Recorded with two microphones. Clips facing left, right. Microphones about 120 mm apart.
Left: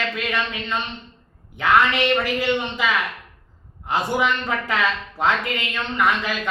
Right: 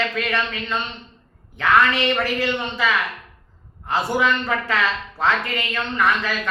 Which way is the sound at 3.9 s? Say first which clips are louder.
Right 1 dB; 15° left (ahead or behind).